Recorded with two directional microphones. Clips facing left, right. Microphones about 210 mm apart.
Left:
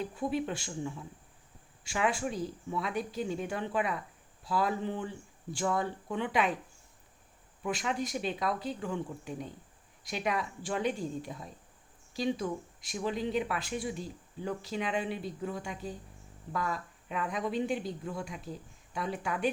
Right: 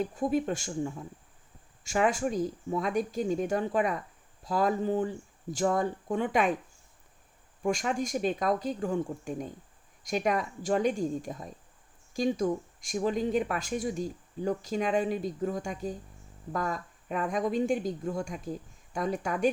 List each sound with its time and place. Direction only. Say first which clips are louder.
0.0 s speech: right 4 dB; 45° right (ahead or behind)
7.6 s speech: right 4 dB; 45° right (ahead or behind)